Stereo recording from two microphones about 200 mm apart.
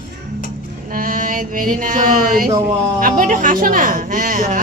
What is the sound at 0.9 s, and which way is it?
A woman's voice, 45° right (ahead or behind).